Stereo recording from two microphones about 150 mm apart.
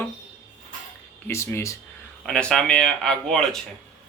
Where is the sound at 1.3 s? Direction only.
20° left (ahead or behind).